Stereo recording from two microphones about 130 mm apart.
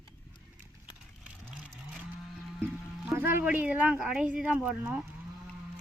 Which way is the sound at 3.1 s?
15° right (ahead or behind).